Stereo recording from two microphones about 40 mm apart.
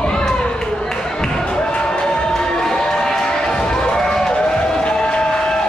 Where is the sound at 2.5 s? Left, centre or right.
Centre.